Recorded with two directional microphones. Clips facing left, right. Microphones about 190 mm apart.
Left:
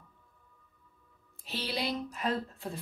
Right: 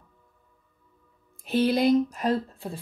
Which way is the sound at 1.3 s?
50° right (ahead or behind).